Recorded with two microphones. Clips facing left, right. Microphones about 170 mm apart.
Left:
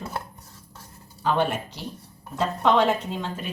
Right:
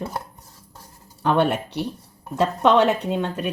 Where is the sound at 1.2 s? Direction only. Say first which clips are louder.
Right 4 dB; 65° right (ahead or behind).